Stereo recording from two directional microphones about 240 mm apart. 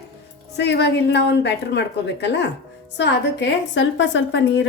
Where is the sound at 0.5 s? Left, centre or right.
Left.